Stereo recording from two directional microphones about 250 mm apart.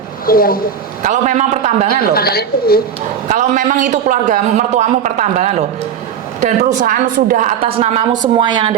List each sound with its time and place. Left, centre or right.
0.3 s a woman's voice: left
1.0 s a man's voice: right
1.9 s a woman's voice: left
3.2 s a man's voice: right